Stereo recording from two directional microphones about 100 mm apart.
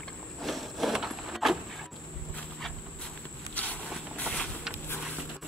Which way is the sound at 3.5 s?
15° left (ahead or behind).